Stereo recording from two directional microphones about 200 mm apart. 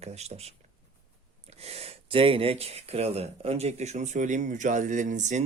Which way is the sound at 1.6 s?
30° right (ahead or behind).